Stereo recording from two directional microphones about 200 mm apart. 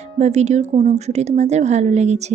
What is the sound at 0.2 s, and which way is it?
Speech, 35° right (ahead or behind).